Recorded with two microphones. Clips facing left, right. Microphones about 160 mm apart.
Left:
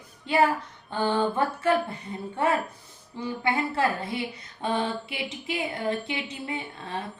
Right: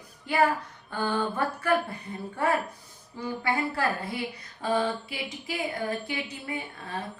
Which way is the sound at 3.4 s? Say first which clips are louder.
Left 3 dB; 25° left (ahead or behind).